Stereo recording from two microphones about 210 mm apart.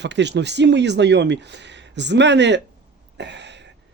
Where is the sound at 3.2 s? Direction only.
55° right (ahead or behind).